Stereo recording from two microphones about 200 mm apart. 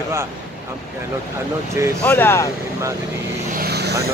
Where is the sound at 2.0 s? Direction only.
10° left (ahead or behind).